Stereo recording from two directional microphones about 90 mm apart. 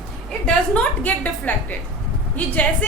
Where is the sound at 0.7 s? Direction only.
15° left (ahead or behind).